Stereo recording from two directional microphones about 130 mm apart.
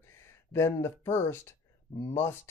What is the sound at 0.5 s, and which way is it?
Speech, 20° left (ahead or behind).